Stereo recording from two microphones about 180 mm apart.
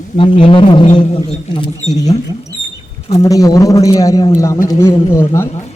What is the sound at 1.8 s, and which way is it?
Speech, 40° left (ahead or behind).